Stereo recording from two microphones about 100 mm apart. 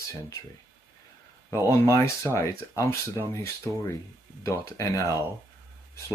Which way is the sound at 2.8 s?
25° left (ahead or behind).